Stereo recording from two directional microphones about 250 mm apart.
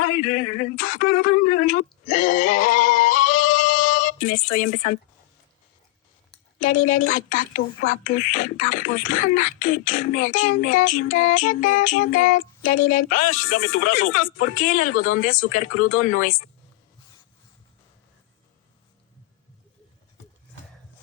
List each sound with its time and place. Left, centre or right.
0.0 s speech: left
7.1 s speech: left